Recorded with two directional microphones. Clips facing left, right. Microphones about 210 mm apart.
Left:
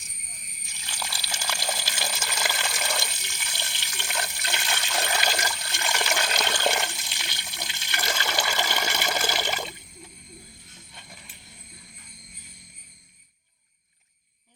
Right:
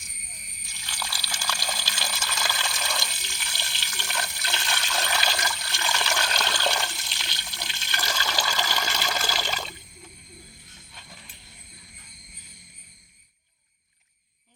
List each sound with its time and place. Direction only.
0.9 s water: 25° left (ahead or behind)
6.7 s toilet flush: 20° left (ahead or behind)
7.5 s water: 20° left (ahead or behind)